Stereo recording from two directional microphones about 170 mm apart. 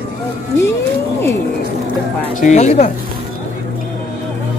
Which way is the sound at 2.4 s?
45° left (ahead or behind).